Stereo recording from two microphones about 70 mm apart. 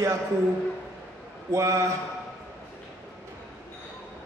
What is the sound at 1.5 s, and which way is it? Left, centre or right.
Speech, right.